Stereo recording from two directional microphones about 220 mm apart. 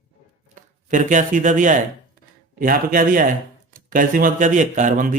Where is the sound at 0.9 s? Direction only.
35° right (ahead or behind).